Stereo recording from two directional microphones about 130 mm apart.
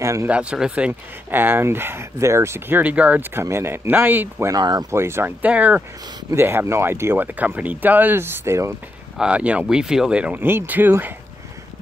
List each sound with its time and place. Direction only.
0.0 s speech: 20° right (ahead or behind)
0.3 s speech: 10° right (ahead or behind)
4.6 s speech: 30° right (ahead or behind)
4.9 s speech: 20° right (ahead or behind)
9.2 s speech: 10° right (ahead or behind)